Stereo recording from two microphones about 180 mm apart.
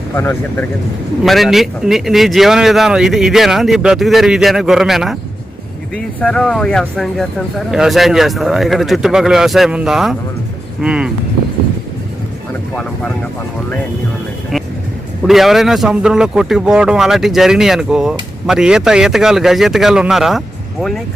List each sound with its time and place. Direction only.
0.1 s speech: 10° left (ahead or behind)
1.2 s a man's voice: centre (ahead or behind)
6.1 s a man's voice: 5° left (ahead or behind)
12.7 s speech: 5° left (ahead or behind)
15.2 s a man's voice: centre (ahead or behind)